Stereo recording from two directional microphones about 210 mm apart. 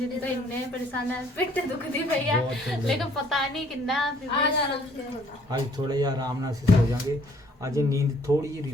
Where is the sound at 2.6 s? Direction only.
Centre (ahead or behind).